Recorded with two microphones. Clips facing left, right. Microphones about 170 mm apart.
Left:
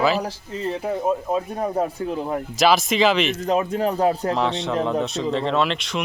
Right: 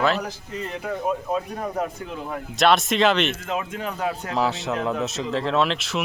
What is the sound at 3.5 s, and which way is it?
Speech, 35° left (ahead or behind).